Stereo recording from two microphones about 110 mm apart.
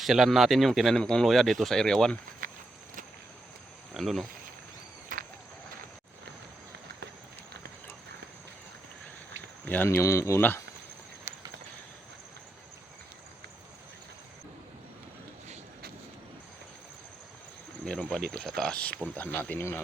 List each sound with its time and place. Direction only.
0.0 s speech: centre (ahead or behind)
3.9 s speech: centre (ahead or behind)
9.6 s speech: 15° left (ahead or behind)
17.8 s speech: 10° left (ahead or behind)